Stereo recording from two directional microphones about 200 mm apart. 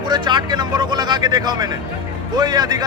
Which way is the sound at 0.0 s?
20° right (ahead or behind).